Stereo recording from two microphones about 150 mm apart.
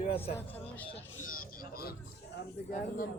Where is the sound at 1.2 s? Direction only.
70° left (ahead or behind); by 2.0 s 90° left.